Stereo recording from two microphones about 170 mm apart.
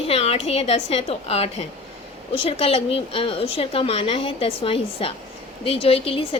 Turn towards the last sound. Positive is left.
turn(degrees=35)  # may be behind; listen again after turning